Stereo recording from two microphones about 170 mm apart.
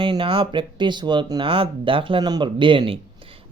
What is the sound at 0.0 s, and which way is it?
Speech, 30° right (ahead or behind).